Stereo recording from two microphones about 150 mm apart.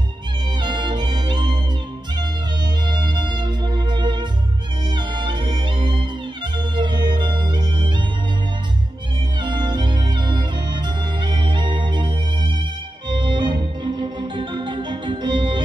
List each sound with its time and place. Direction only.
0.6 s music: 30° right (ahead or behind)
2.9 s music: 30° right (ahead or behind)
9.4 s music: 30° right (ahead or behind)
13.1 s organ: 30° right (ahead or behind)